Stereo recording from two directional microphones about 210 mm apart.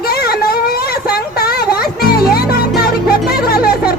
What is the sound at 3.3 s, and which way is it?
Music, 45° left (ahead or behind).